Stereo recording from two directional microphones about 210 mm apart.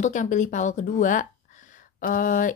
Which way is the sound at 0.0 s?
35° left (ahead or behind).